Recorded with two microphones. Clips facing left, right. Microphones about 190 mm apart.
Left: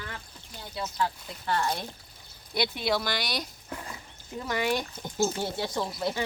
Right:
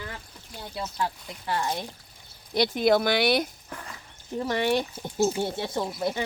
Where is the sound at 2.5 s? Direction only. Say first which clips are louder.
Right 7 dB; 40° right (ahead or behind); by 3.4 s 60° right (ahead or behind).